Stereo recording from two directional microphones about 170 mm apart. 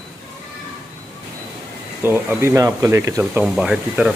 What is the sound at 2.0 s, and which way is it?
Speech, 15° right (ahead or behind).